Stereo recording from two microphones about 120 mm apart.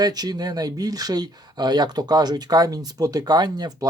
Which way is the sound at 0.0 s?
35° right (ahead or behind).